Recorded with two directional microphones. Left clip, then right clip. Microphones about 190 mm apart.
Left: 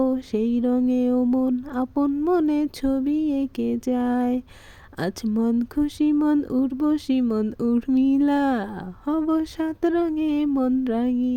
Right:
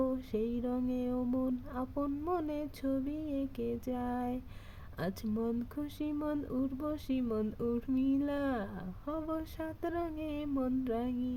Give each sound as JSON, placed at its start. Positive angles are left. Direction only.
{"t": 0.0, "sound": "speech", "side_deg": 45}